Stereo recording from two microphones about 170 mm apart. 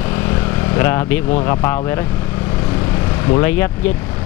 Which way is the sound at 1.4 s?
15° left (ahead or behind).